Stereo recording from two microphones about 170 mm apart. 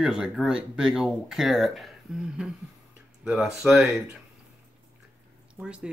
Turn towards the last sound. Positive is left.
turn(degrees=-5)  # may be behind; listen again after turning